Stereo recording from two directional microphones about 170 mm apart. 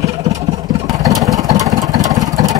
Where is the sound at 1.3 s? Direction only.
20° right (ahead or behind).